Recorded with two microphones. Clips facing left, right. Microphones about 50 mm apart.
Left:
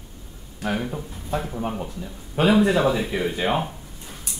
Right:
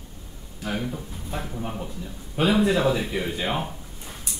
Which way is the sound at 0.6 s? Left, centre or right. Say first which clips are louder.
Left 3 dB; centre.